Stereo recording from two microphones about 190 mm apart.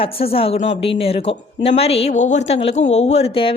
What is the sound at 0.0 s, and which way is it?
A woman's voice, 30° left (ahead or behind).